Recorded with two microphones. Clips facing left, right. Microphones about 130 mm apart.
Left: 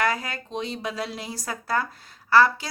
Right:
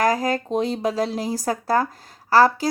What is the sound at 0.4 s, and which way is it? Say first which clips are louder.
A woman's voice: right 8 dB; 45° right (ahead or behind).